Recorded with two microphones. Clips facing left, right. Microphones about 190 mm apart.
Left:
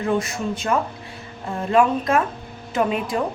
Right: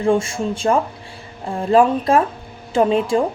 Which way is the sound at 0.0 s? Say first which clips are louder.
Right 5 dB; 30° right (ahead or behind).